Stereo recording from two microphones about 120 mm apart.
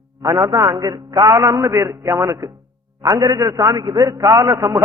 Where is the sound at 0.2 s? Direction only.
30° right (ahead or behind).